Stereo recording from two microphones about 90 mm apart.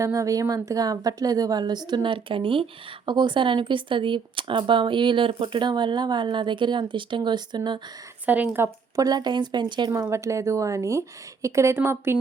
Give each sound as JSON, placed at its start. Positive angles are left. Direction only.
{"t": 0.0, "sound": "a woman's voice", "side_deg": -35}
{"t": 3.1, "sound": "speech", "side_deg": -60}
{"t": 8.3, "sound": "speech", "side_deg": -20}
{"t": 9.0, "sound": "speech", "side_deg": -45}
{"t": 9.9, "sound": "speech", "side_deg": -35}